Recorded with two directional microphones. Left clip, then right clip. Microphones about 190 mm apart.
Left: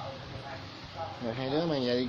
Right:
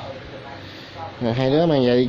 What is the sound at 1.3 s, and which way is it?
Speech, 50° right (ahead or behind).